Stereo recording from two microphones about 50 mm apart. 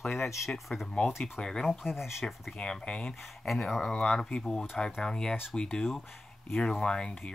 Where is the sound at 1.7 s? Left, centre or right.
Centre.